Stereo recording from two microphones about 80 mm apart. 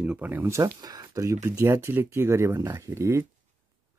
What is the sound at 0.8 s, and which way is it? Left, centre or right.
Speech, right.